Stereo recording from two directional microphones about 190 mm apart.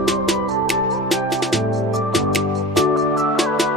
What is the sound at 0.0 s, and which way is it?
Music, centre (ahead or behind).